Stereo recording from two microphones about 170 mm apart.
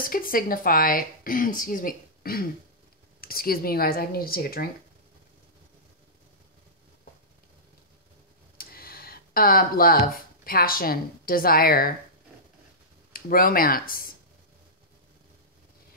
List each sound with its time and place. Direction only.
0.0 s speech: 55° left (ahead or behind)
8.5 s speech: 60° left (ahead or behind)
13.1 s speech: 60° left (ahead or behind)